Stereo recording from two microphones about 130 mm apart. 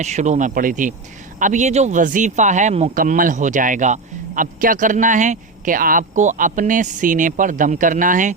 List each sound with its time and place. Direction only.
0.0 s speech: 65° right (ahead or behind); by 0.9 s 85° right
1.4 s speech: 70° right (ahead or behind); by 8.3 s 90° right